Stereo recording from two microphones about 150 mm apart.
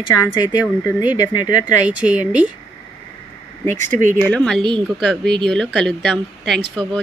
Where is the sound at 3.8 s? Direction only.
55° right (ahead or behind).